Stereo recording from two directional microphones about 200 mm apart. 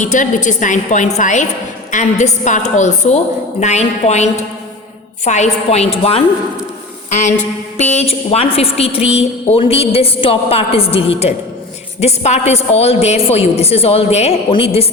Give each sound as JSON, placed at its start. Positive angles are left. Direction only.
{"t": 0.0, "sound": "a woman's voice", "side_deg": 40}